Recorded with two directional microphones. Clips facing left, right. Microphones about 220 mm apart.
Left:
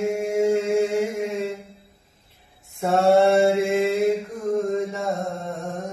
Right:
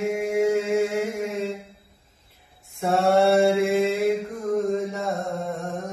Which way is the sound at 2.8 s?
Centre (ahead or behind).